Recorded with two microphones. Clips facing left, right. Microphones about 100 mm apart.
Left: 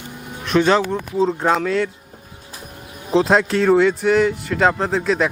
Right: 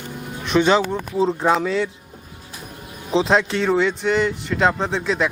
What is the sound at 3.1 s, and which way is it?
Speech, 5° left (ahead or behind).